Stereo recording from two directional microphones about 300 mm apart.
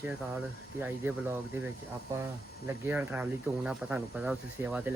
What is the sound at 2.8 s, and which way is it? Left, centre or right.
Speech, centre.